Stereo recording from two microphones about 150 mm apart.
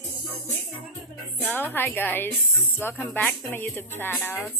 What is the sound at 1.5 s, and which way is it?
Speech, 15° left (ahead or behind).